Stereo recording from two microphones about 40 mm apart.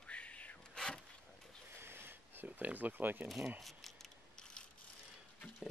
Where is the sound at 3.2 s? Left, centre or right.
Centre.